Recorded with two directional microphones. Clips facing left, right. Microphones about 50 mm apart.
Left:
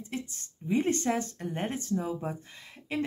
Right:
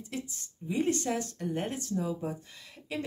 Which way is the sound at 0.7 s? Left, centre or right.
Left.